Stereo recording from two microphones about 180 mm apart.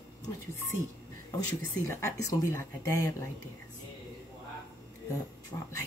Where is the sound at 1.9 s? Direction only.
15° left (ahead or behind).